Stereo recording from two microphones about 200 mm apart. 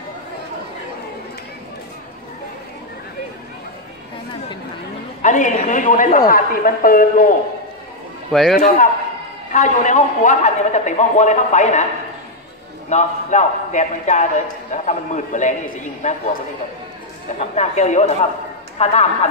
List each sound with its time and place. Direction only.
5.2 s a man's voice: 40° left (ahead or behind)
8.3 s a man's voice: centre (ahead or behind)
8.5 s a man's voice: 40° left (ahead or behind)
12.9 s a man's voice: 35° left (ahead or behind)
17.4 s a man's voice: 35° left (ahead or behind)